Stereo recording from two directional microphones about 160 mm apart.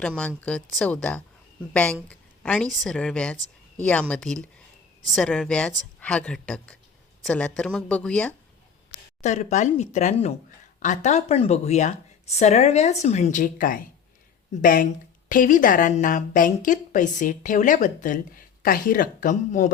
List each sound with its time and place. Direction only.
0.2 s speech: 5° left (ahead or behind)
2.0 s a sound: 5° left (ahead or behind)
2.7 s speech: centre (ahead or behind)
9.2 s a woman's voice: 45° left (ahead or behind)